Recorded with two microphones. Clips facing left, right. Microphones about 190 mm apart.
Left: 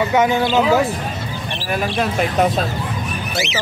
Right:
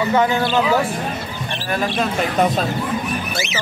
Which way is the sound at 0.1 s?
15° left (ahead or behind).